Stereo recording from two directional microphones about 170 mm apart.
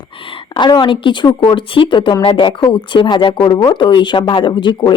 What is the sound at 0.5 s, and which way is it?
Speech, 25° left (ahead or behind).